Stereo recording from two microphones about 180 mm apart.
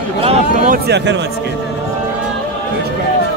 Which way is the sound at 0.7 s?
70° right (ahead or behind).